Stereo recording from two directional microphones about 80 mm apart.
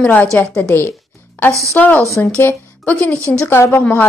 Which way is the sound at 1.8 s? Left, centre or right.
Centre.